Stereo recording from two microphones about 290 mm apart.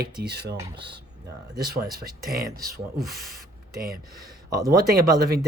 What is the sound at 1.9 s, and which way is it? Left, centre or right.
Speech, right.